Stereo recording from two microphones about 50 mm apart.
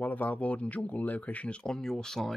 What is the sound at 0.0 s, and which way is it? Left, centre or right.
Speech, left.